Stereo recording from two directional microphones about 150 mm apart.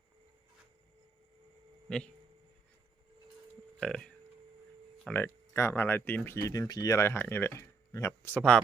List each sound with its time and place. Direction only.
1.9 s speech: 5° left (ahead or behind)
3.8 s speech: 5° left (ahead or behind)